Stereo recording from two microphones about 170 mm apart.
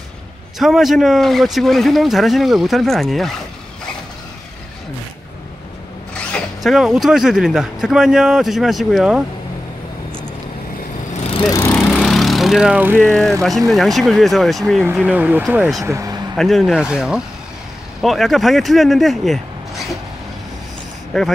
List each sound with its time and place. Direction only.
0.6 s speech: centre (ahead or behind)
6.3 s speech: centre (ahead or behind)
11.4 s speech: 20° left (ahead or behind)
11.7 s lawn mower: centre (ahead or behind)
12.9 s speech: 10° left (ahead or behind)
15.8 s speech: 20° right (ahead or behind)
16.3 s speech: centre (ahead or behind)
21.1 s speech: centre (ahead or behind)